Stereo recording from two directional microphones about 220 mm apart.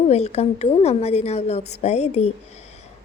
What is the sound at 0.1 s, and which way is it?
A woman's voice, 30° left (ahead or behind).